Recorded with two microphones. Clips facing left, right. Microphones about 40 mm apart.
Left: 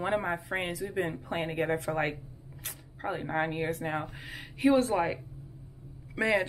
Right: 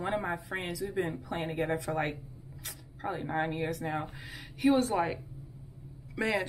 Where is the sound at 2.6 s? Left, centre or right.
Left.